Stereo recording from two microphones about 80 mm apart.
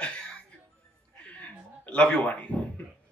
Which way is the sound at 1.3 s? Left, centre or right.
Centre.